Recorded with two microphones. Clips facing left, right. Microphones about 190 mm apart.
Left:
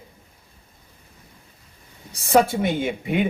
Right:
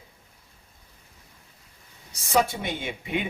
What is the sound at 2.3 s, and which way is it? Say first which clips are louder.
Speech: left 6 dB; 50° left (ahead or behind).